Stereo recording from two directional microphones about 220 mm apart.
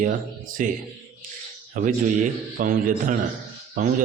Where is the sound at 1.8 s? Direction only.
35° right (ahead or behind).